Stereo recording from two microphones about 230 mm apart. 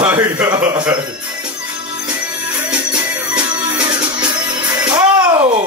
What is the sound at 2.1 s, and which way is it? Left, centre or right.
Music, centre.